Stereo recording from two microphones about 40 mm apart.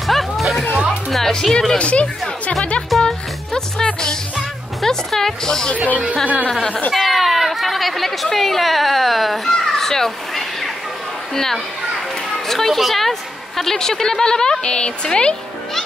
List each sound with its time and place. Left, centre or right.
0.0 s music: centre
0.4 s children playing: centre
1.1 s music: centre
1.8 s speech: left
3.0 s music: centre
6.2 s speech: left
6.9 s a sound: centre
11.3 s a woman's voice: centre